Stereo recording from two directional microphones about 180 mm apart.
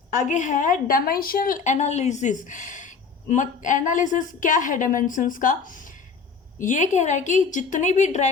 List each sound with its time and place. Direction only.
0.1 s a woman's voice: 45° left (ahead or behind)